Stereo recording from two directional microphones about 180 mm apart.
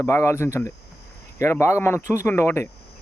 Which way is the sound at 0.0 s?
15° left (ahead or behind).